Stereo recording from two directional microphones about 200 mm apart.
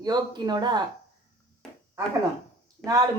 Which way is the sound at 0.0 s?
20° right (ahead or behind).